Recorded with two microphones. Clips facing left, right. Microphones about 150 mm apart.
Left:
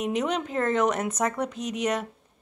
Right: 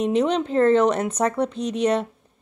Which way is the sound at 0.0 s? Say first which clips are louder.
Right 6 dB; 30° right (ahead or behind).